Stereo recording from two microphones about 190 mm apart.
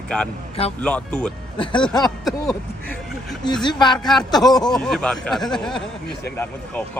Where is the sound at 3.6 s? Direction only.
25° left (ahead or behind).